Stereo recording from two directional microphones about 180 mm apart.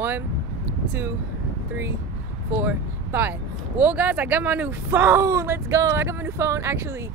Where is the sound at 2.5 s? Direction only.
10° right (ahead or behind).